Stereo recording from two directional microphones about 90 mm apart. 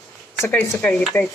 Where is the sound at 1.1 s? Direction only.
30° left (ahead or behind).